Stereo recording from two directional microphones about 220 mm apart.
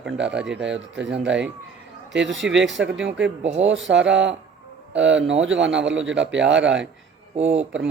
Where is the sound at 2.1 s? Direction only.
55° right (ahead or behind).